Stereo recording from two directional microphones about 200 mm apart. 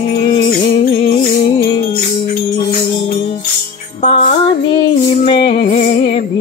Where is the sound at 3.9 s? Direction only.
35° left (ahead or behind).